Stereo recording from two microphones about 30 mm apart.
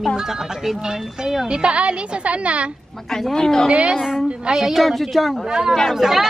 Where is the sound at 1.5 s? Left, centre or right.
Right.